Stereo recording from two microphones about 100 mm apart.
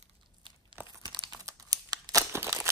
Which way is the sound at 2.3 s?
25° right (ahead or behind).